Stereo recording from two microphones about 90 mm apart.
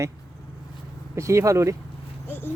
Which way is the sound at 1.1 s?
35° right (ahead or behind).